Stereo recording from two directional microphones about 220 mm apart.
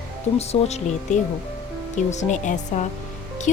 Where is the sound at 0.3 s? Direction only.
30° left (ahead or behind).